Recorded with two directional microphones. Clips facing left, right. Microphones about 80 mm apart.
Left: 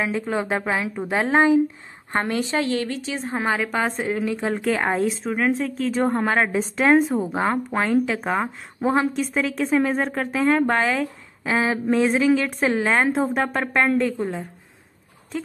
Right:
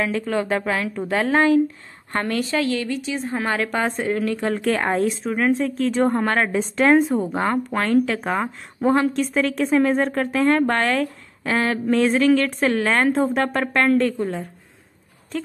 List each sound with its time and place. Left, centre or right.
0.0 s a woman's voice: centre
3.4 s a woman's voice: centre
15.3 s speech: centre